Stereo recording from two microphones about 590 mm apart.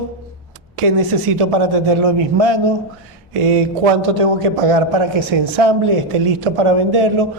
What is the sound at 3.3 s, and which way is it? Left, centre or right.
A man's voice, right.